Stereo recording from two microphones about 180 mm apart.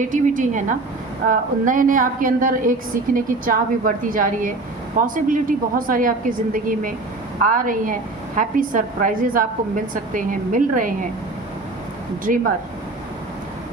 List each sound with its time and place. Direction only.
0.0 s a woman's voice: 45° right (ahead or behind)
12.3 s a woman's voice: 45° right (ahead or behind)